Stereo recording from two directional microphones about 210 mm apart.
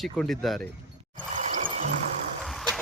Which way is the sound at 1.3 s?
35° right (ahead or behind).